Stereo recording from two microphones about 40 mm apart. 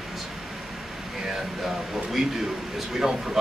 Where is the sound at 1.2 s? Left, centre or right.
Centre.